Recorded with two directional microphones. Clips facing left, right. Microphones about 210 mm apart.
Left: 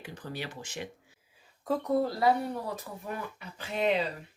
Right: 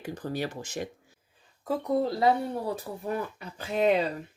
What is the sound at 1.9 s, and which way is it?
Speech, 20° right (ahead or behind).